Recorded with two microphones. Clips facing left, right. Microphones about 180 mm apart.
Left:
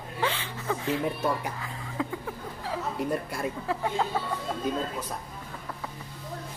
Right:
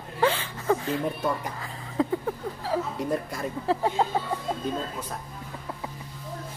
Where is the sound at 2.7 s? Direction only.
45° right (ahead or behind).